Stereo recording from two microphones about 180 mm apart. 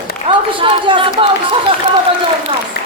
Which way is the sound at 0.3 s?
30° right (ahead or behind).